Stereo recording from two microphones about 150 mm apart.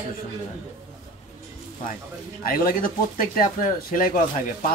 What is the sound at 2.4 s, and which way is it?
Speech, 70° left (ahead or behind).